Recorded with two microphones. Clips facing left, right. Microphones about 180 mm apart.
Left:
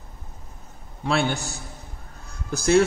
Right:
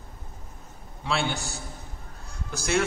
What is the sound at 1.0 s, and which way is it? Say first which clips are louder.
Speech: left 5 dB; 50° left (ahead or behind).